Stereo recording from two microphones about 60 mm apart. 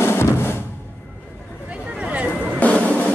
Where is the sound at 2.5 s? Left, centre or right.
Left.